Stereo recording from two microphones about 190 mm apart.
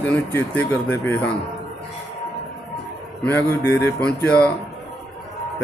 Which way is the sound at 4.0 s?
5° left (ahead or behind).